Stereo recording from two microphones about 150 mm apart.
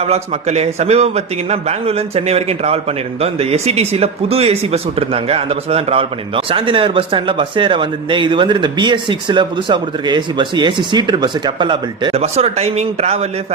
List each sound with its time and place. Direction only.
0.0 s a man's voice: 45° right (ahead or behind)
12.2 s speech: 45° right (ahead or behind)